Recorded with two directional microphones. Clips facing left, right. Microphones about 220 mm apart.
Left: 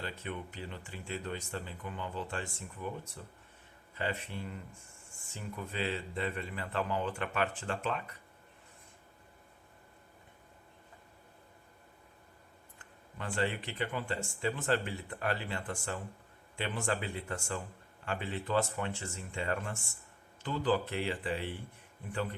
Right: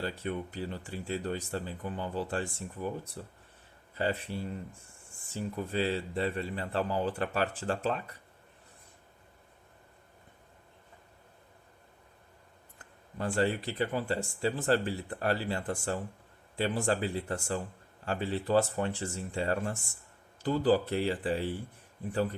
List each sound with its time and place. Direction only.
0.0 s speech: 40° right (ahead or behind)
3.9 s speech: 35° right (ahead or behind)
12.8 s speech: 40° right (ahead or behind)